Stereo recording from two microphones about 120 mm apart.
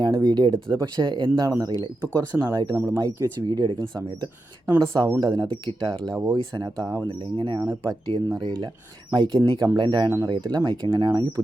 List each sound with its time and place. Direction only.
0.0 s speech: 35° right (ahead or behind)
2.7 s speech: 20° right (ahead or behind)
3.0 s speech: 30° right (ahead or behind)
7.1 s speech: 40° right (ahead or behind)